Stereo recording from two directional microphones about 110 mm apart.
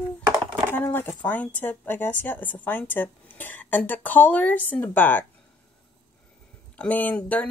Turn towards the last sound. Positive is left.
turn(degrees=15)  # may be behind; listen again after turning